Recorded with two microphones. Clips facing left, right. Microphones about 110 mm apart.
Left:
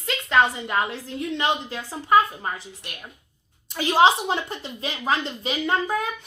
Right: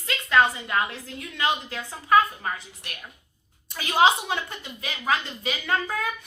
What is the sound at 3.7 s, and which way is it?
A woman's voice, 25° left (ahead or behind).